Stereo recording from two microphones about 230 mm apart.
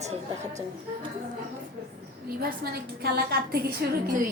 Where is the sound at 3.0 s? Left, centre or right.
Right.